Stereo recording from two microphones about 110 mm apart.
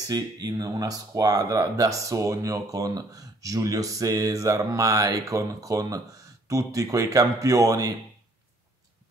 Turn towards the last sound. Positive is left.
turn(degrees=-30)  # may be behind; listen again after turning